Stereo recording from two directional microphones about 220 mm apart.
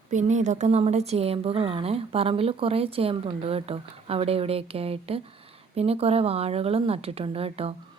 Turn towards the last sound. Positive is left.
turn(degrees=-25)  # may be behind; listen again after turning